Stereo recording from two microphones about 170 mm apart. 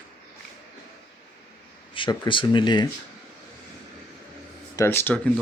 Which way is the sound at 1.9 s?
30° left (ahead or behind).